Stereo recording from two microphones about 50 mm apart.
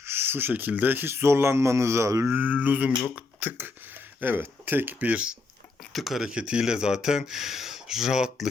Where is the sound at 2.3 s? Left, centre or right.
Right.